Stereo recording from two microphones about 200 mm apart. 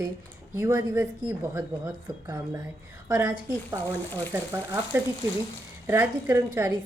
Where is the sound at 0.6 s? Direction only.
15° right (ahead or behind).